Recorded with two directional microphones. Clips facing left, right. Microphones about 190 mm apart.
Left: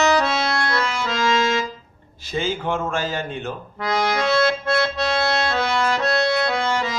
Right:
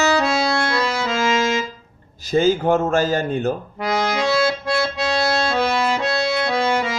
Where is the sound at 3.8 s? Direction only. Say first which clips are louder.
Left 4 dB; 15° right (ahead or behind).